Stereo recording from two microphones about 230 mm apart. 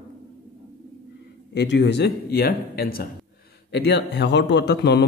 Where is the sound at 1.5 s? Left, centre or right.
Left.